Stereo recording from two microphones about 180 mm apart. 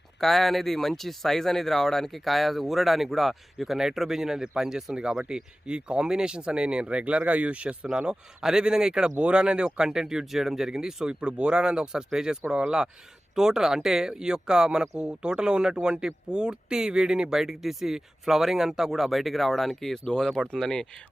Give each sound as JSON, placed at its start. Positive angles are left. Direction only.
{"t": 0.2, "sound": "speech", "side_deg": 0}